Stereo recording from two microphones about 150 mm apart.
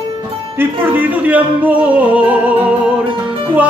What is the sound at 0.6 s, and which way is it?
Speech, 15° right (ahead or behind).